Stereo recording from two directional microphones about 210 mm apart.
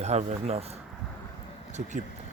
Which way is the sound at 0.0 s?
30° right (ahead or behind).